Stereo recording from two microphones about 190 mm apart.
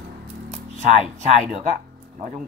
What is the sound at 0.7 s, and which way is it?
Speech, 35° right (ahead or behind).